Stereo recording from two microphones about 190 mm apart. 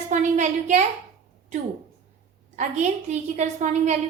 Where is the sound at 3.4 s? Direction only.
40° right (ahead or behind).